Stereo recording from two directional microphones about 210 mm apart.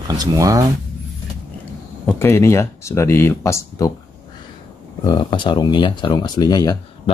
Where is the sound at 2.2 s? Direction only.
10° left (ahead or behind).